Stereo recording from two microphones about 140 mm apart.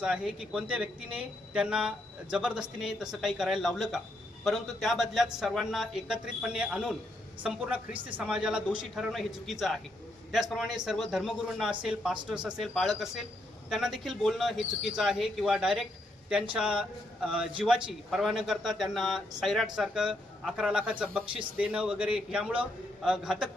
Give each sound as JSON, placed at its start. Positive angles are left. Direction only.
{"t": 0.0, "sound": "a man's voice", "side_deg": -5}
{"t": 8.1, "sound": "a man's voice", "side_deg": -5}